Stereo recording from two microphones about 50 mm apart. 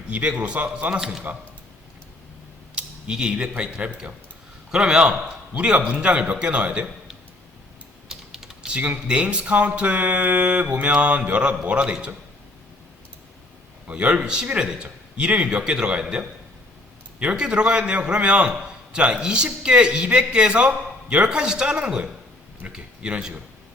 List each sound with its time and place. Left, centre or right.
0.1 s a man's voice: right
1.3 s speech: right
2.7 s a man's voice: centre
8.1 s typing: centre
8.7 s a man's voice: right
13.8 s a man's voice: right
17.3 s a man's voice: centre
21.2 s a man's voice: centre